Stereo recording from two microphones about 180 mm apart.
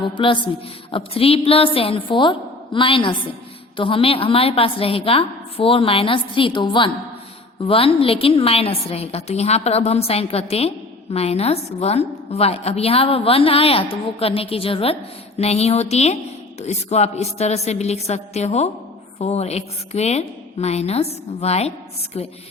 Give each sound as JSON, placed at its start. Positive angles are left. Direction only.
{"t": 0.2, "sound": "a woman's voice", "side_deg": 30}